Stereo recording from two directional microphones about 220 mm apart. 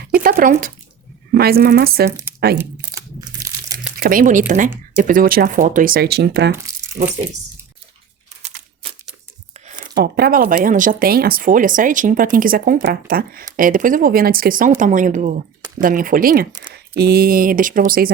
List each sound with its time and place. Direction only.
0.1 s a sound: 40° right (ahead or behind)
1.3 s a woman's voice: 45° right (ahead or behind)
2.0 s speech: 10° right (ahead or behind)
2.6 s crumpling: 15° right (ahead or behind)
4.0 s speech: 40° right (ahead or behind)
6.5 s a sound: 10° right (ahead or behind)
8.4 s crumpling: 30° right (ahead or behind)
9.6 s speech: 45° right (ahead or behind)
16.5 s speech: 20° right (ahead or behind)
17.0 s speech: 45° right (ahead or behind)